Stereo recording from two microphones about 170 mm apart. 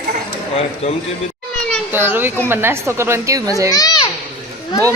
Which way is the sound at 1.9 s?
10° right (ahead or behind).